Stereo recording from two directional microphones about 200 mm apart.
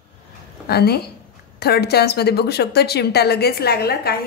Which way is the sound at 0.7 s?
55° left (ahead or behind).